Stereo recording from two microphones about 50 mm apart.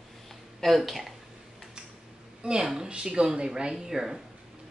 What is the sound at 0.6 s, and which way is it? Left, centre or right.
Speech, centre.